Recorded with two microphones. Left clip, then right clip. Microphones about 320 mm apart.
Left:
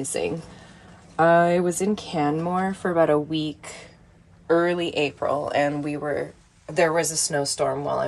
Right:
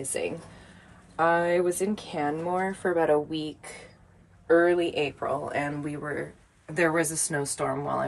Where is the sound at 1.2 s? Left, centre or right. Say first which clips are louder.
Left 5 dB; left.